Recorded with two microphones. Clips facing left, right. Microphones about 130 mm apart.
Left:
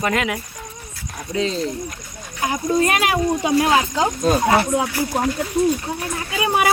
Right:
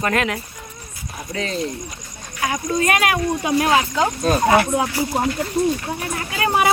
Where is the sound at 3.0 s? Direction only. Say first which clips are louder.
Left 1 dB; 20° left (ahead or behind).